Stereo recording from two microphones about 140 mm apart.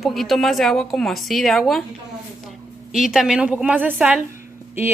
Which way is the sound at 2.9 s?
Centre (ahead or behind).